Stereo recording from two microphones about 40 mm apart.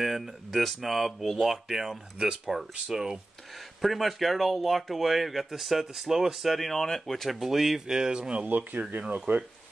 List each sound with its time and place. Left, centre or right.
0.0 s speech: centre
7.3 s speech: centre
7.8 s speech: centre
8.5 s speech: right